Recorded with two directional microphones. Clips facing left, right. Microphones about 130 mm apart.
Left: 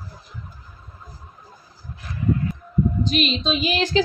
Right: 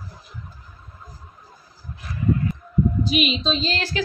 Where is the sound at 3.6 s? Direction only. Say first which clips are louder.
Left 5 dB; 15° left (ahead or behind).